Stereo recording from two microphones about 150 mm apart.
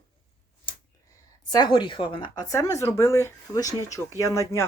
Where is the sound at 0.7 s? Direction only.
35° left (ahead or behind).